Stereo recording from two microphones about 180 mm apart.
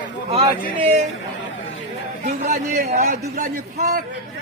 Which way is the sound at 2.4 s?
40° right (ahead or behind).